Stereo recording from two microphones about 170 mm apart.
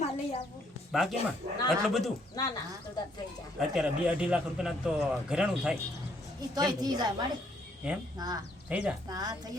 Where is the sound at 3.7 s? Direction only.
5° right (ahead or behind).